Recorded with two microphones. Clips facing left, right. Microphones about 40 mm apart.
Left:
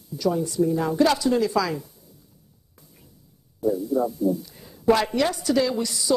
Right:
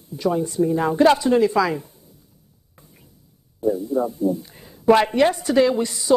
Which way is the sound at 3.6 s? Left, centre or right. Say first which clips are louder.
Right 2 dB; right.